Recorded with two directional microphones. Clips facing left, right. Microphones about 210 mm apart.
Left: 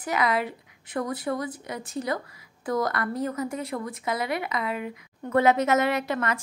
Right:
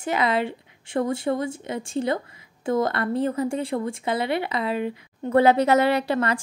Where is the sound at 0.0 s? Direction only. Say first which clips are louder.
Right 3 dB; 25° right (ahead or behind).